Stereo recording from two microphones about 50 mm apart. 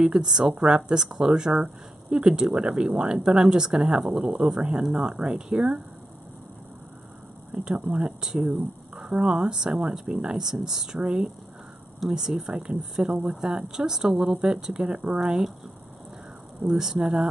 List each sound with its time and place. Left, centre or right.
0.0 s speech: centre
7.5 s speech: centre
16.6 s speech: centre